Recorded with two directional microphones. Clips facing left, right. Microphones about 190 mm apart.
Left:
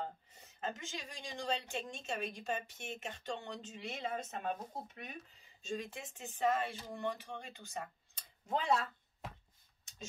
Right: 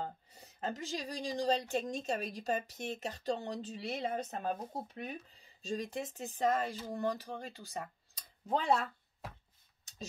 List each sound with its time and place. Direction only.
0.0 s speech: 35° right (ahead or behind)